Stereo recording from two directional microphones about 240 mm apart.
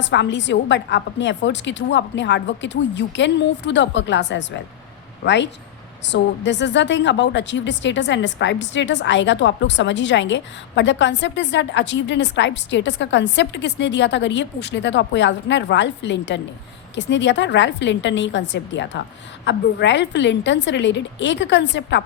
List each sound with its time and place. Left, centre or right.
0.0 s a woman's voice: left